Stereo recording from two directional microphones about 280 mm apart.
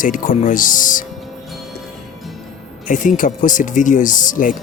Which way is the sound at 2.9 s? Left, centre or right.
Left.